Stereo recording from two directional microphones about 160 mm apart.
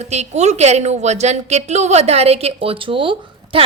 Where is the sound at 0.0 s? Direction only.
45° right (ahead or behind).